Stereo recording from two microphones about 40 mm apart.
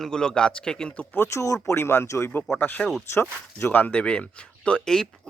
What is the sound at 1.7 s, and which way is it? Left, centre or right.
Speech, left.